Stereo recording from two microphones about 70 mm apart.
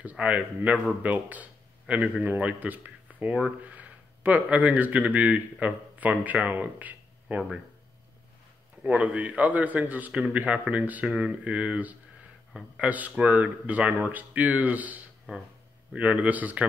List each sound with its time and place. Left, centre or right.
0.0 s a man's voice: centre
8.8 s a man's voice: centre